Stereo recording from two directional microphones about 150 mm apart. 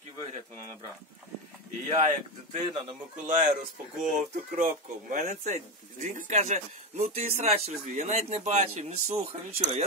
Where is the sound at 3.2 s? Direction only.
60° right (ahead or behind).